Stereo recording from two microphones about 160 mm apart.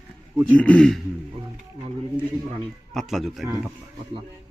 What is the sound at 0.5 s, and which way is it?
Speech, 10° left (ahead or behind).